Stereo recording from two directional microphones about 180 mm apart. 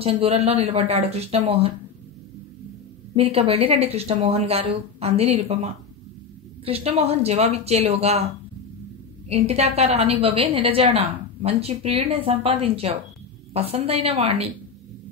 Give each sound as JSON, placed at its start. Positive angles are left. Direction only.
{"t": 0.0, "sound": "a woman's voice", "side_deg": -35}
{"t": 3.2, "sound": "a woman's voice", "side_deg": -35}
{"t": 9.3, "sound": "a woman's voice", "side_deg": -35}